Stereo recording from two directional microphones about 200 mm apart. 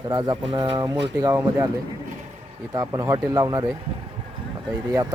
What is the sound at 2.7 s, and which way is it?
Speech, 20° right (ahead or behind).